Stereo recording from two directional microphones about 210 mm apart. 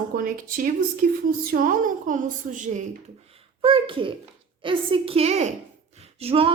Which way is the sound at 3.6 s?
25° right (ahead or behind).